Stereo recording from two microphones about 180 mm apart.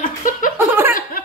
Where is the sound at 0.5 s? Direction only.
10° right (ahead or behind).